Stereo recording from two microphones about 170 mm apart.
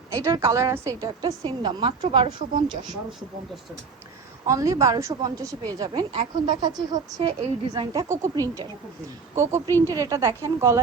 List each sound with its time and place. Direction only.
0.1 s a woman's voice: 20° right (ahead or behind)
4.4 s a woman's voice: 20° right (ahead or behind)